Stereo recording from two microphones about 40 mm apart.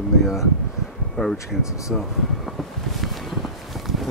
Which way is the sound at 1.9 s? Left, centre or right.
Centre.